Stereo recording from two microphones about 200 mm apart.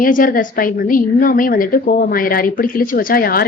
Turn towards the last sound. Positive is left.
turn(degrees=45)  # may be behind; listen again after turning